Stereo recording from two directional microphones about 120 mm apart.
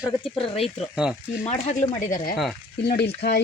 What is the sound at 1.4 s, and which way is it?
Speech, 80° left.